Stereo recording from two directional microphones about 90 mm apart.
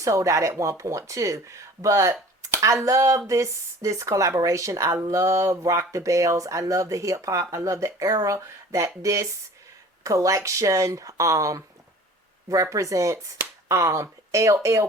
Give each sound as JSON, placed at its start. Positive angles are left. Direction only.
{"t": 0.0, "sound": "speech", "side_deg": -35}
{"t": 12.7, "sound": "speech", "side_deg": -35}